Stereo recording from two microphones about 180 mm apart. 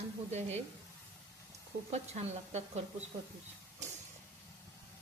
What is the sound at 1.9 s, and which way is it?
Speech, 40° right (ahead or behind).